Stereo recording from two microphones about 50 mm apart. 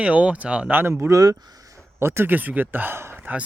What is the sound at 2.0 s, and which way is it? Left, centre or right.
Speech, right.